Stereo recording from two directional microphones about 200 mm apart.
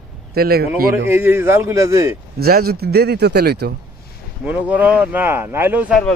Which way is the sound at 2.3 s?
50° right (ahead or behind).